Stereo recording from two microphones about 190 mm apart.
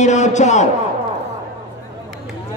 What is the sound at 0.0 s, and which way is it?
Speech, 40° left (ahead or behind).